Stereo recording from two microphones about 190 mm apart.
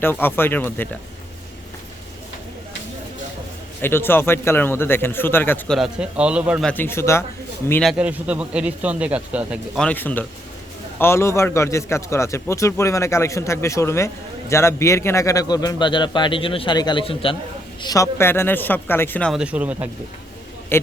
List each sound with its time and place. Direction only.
0.0 s a man's voice: 10° left (ahead or behind)
3.8 s a man's voice: 10° left (ahead or behind); by 6.7 s 5° right (ahead or behind)
6.7 s a man's voice: 10° left (ahead or behind)
7.7 s a man's voice: centre (ahead or behind)
9.8 s a man's voice: 10° left (ahead or behind); by 17.3 s 30° left (ahead or behind)
17.8 s a man's voice: 15° left (ahead or behind)
19.3 s speech: 5° right (ahead or behind)